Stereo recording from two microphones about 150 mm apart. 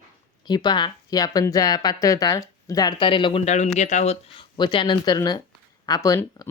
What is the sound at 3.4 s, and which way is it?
Speech, 50° left (ahead or behind).